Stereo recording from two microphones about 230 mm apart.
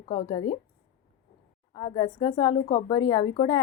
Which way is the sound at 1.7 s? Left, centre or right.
Centre.